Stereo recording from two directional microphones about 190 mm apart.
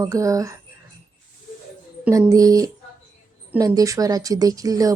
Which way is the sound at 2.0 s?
15° right (ahead or behind).